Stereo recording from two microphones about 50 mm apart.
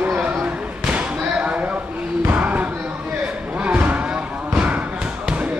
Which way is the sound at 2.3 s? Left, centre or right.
Right.